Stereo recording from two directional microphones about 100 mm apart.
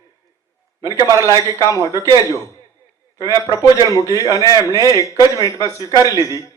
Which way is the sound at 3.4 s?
35° left (ahead or behind).